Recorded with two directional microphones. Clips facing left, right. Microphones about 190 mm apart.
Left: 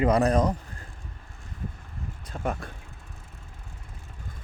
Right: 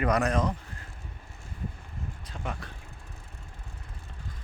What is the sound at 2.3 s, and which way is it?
Vehicle, 50° left (ahead or behind).